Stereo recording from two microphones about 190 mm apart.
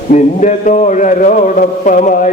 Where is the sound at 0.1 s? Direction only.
40° left (ahead or behind).